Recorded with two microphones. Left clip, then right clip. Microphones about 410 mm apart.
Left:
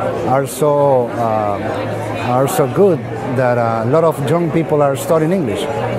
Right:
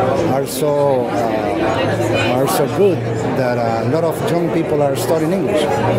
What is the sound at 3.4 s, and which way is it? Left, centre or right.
Speech, left.